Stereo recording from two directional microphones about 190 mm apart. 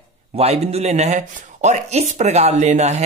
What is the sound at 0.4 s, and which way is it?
Speech, 35° right (ahead or behind).